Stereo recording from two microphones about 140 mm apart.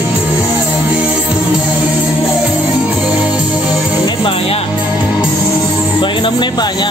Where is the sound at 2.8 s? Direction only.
10° right (ahead or behind).